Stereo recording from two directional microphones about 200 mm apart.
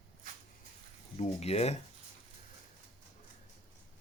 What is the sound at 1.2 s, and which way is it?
Speech, 30° left (ahead or behind).